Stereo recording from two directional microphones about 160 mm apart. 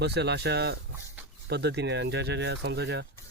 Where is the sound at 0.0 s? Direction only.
90° right.